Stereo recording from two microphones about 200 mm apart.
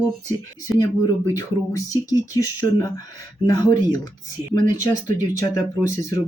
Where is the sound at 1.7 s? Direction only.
15° left (ahead or behind).